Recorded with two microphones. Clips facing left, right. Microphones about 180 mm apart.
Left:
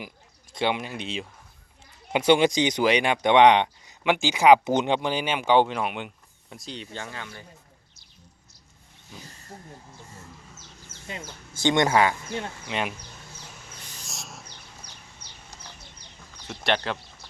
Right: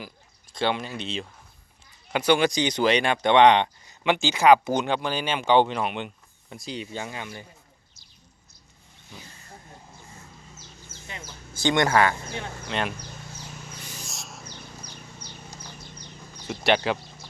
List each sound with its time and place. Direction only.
0.5 s speech: 15° left (ahead or behind)
2.1 s speech: 20° left (ahead or behind); by 7.4 s 15° right (ahead or behind)
11.1 s speech: 25° left (ahead or behind)
13.9 s a sound: centre (ahead or behind)
14.8 s a sound: 40° right (ahead or behind)
15.5 s bird: 10° left (ahead or behind)
16.5 s speech: 5° right (ahead or behind)